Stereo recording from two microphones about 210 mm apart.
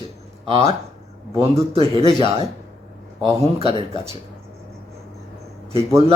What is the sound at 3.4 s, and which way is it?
Speech, 30° right (ahead or behind).